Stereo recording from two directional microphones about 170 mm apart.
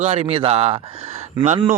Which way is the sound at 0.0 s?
40° right (ahead or behind).